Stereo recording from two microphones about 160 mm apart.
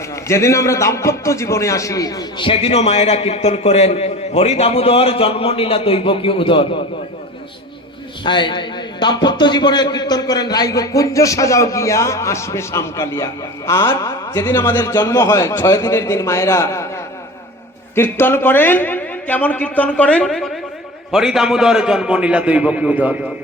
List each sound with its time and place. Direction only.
0.3 s a man's voice: 15° left (ahead or behind)
2.5 s a man's voice: 40° left (ahead or behind)
8.2 s a man's voice: 30° left (ahead or behind)
17.9 s a man's voice: 15° left (ahead or behind); by 23.1 s 10° right (ahead or behind)